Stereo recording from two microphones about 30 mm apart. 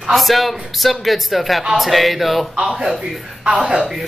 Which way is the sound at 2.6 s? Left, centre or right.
Centre.